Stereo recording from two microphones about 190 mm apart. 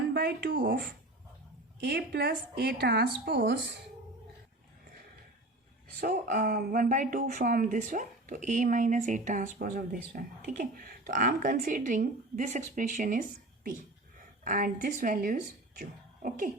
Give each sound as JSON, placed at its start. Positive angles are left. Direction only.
{"t": 0.1, "sound": "speech", "side_deg": -60}
{"t": 1.8, "sound": "a woman's voice", "side_deg": -60}
{"t": 6.0, "sound": "speech", "side_deg": -50}
{"t": 14.4, "sound": "a woman's voice", "side_deg": -45}